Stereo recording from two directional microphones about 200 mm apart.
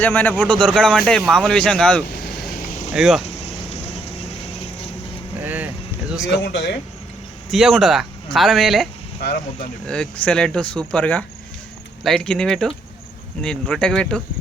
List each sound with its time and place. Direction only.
0.0 s speech: 10° left (ahead or behind)
3.2 s a sound: 30° left (ahead or behind)
5.4 s vehicle: 10° right (ahead or behind)
6.4 s speech: 60° left (ahead or behind)
7.5 s speech: centre (ahead or behind)